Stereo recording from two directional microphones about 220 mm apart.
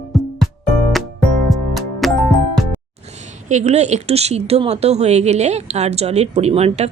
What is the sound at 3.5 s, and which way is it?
A woman's voice, 30° right (ahead or behind).